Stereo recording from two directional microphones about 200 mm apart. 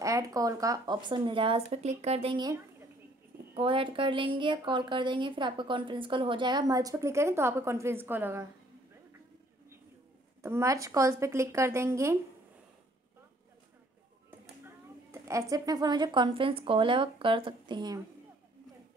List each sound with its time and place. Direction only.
0.0 s a woman's voice: 15° right (ahead or behind)
10.4 s speech: 15° right (ahead or behind)
15.0 s a woman's voice: 15° right (ahead or behind)